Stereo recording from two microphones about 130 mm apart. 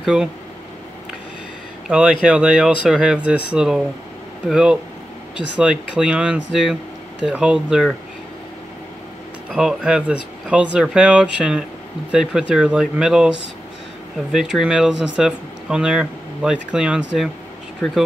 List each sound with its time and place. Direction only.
0.0 s speech: 5° right (ahead or behind)
1.9 s speech: 10° right (ahead or behind)
9.5 s speech: 5° right (ahead or behind)
14.3 s speech: 5° right (ahead or behind)